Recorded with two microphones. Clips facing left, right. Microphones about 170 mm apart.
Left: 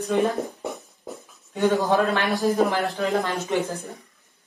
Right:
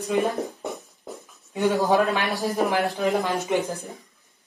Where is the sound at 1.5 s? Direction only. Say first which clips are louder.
Even; 15° right (ahead or behind).